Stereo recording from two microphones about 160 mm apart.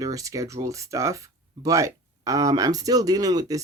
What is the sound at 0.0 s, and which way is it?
Speech, 20° right (ahead or behind).